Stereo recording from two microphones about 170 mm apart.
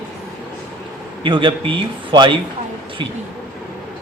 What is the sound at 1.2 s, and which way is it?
A man's voice, 30° right (ahead or behind).